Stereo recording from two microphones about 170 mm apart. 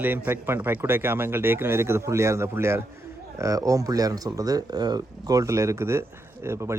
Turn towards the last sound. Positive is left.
turn(degrees=-15)  # may be behind; listen again after turning